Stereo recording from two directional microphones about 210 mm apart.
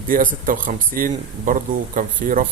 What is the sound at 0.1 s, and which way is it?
Speech, 40° right (ahead or behind).